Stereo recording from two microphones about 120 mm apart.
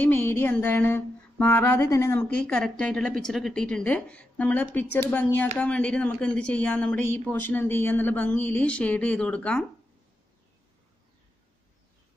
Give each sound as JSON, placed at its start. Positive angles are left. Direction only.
{"t": 0.0, "sound": "speech", "side_deg": 15}
{"t": 2.2, "sound": "speech", "side_deg": 10}